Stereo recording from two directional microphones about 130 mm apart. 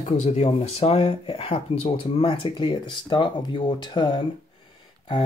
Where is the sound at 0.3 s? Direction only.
50° left (ahead or behind).